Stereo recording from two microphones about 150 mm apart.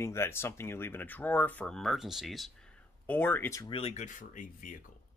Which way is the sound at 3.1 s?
10° left (ahead or behind).